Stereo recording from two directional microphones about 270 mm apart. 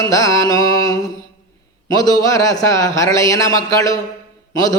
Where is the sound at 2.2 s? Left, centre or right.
Centre.